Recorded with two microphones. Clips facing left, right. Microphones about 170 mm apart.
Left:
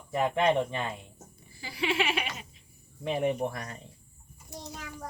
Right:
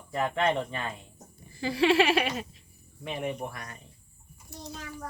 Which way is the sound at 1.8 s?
70° right (ahead or behind).